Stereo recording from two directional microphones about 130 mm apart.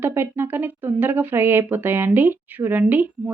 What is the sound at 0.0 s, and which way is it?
Speech, 15° right (ahead or behind).